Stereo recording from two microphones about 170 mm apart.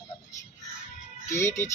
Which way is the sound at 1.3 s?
15° left (ahead or behind).